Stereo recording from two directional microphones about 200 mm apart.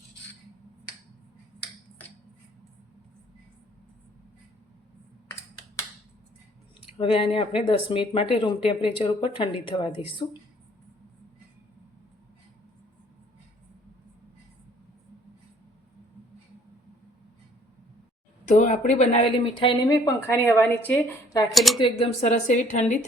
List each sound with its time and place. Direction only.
7.0 s speech: 30° left (ahead or behind)
18.4 s speech: 40° left (ahead or behind)
20.1 s a woman's voice: 15° left (ahead or behind)
21.5 s speech: centre (ahead or behind)
21.8 s speech: 25° left (ahead or behind)